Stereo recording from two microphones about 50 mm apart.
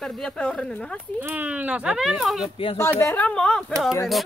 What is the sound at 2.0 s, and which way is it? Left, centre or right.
Speech, centre.